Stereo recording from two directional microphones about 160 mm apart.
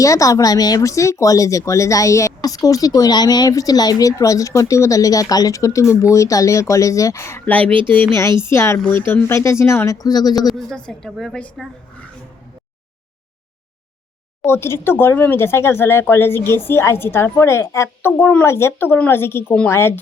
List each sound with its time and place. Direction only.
0.0 s speech: 20° left (ahead or behind)
7.7 s speech: 30° right (ahead or behind)
8.1 s speech: 20° left (ahead or behind)
10.4 s a woman's voice: 5° left (ahead or behind)
14.4 s speech: 15° left (ahead or behind)